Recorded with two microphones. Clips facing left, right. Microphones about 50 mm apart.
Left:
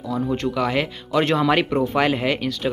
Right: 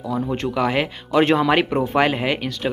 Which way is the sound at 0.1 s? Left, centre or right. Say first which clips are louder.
Even; centre.